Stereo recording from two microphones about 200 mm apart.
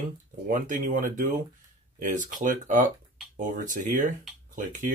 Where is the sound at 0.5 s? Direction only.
40° right (ahead or behind).